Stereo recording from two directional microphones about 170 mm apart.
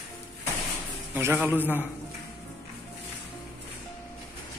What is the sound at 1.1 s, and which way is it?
Speech, 10° right (ahead or behind).